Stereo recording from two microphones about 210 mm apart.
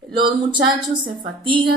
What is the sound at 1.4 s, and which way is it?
Speech, 25° right (ahead or behind).